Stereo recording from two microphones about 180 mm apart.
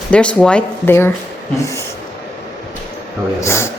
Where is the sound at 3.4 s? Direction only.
15° left (ahead or behind).